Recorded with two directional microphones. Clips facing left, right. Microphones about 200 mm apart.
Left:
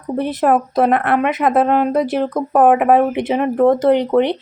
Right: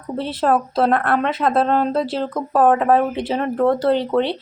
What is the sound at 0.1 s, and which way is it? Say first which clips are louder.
A woman's voice: left 3 dB; 20° left (ahead or behind).